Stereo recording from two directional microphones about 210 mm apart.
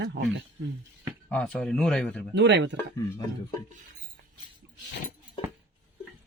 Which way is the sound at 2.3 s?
60° right (ahead or behind).